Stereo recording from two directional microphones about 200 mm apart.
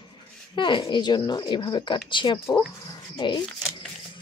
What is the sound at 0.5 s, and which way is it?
Speech, 25° left (ahead or behind).